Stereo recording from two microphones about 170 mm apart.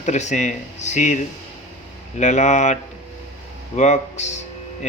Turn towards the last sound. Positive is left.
turn(degrees=40)  # may be behind; listen again after turning